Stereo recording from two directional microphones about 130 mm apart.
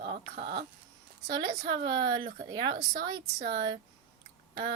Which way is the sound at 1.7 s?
40° right (ahead or behind).